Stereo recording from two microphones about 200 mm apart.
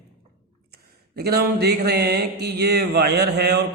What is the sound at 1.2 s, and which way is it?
A man's voice, 50° right (ahead or behind).